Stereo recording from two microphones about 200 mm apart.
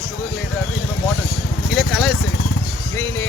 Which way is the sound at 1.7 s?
Centre (ahead or behind).